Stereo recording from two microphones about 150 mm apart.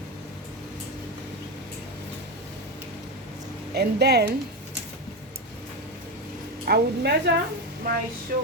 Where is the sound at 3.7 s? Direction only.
90° right.